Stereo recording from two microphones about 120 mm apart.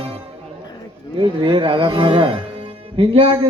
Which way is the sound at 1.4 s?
45° right (ahead or behind).